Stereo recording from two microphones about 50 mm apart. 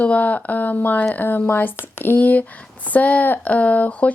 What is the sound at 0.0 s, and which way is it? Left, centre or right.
Speech, left.